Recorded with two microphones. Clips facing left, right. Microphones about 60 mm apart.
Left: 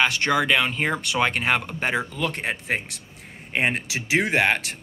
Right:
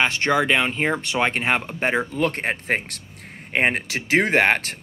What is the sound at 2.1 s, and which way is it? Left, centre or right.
Speech, right.